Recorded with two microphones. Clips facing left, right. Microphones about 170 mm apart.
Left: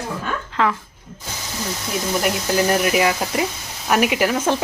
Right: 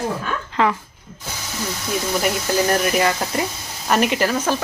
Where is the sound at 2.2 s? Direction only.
Centre (ahead or behind).